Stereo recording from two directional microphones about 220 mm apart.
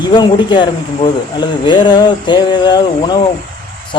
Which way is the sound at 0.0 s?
20° left (ahead or behind).